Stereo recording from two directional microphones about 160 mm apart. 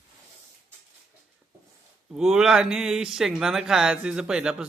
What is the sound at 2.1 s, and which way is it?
Speech, 5° right (ahead or behind).